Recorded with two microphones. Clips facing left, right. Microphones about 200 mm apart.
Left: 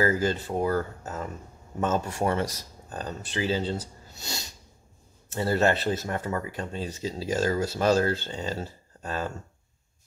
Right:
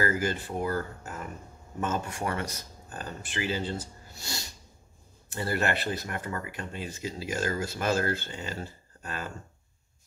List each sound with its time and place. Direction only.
0.0 s speech: 25° left (ahead or behind)
4.1 s sneeze: 20° left (ahead or behind)
5.3 s speech: 25° left (ahead or behind)